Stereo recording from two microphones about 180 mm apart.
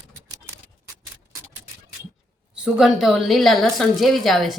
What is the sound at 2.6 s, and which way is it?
A woman's voice, centre (ahead or behind).